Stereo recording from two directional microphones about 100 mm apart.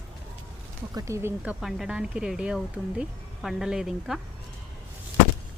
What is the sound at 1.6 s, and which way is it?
Speech, 5° right (ahead or behind).